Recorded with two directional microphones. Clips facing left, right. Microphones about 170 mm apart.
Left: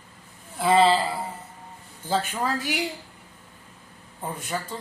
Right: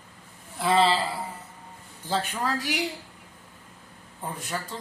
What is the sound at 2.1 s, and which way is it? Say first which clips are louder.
Speech: left 2 dB; 5° left (ahead or behind).